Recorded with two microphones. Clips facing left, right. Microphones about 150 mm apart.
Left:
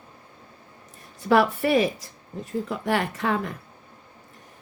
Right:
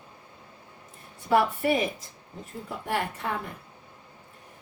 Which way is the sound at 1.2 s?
75° left (ahead or behind).